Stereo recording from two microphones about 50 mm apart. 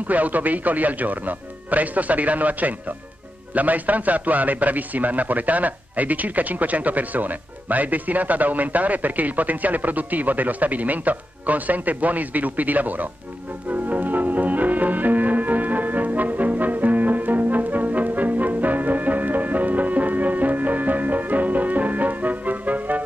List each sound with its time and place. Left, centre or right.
0.1 s a man's voice: right
13.7 s music: right